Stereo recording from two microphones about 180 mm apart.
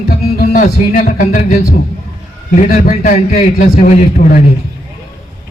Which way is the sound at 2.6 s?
50° left (ahead or behind).